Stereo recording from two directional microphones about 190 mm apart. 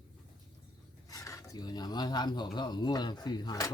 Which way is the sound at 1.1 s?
15° left (ahead or behind).